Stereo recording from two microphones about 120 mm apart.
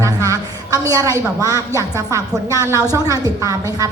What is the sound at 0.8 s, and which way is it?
A man's voice, 30° right (ahead or behind).